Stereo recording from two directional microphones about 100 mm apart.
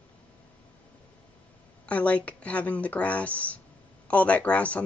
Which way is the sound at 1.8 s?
15° left (ahead or behind).